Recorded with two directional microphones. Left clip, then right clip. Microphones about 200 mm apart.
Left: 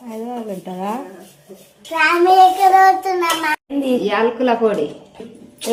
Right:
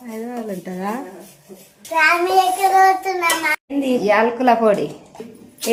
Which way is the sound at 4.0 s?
25° right (ahead or behind).